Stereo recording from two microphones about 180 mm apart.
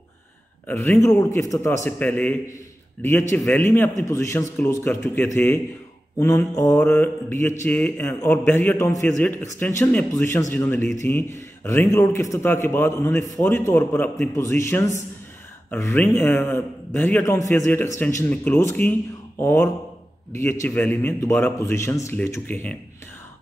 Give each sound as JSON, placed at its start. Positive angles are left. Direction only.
{"t": 0.7, "sound": "a man's voice", "side_deg": 10}